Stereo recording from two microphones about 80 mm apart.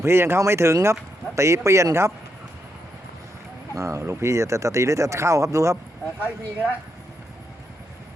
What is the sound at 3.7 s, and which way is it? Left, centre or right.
Speech, right.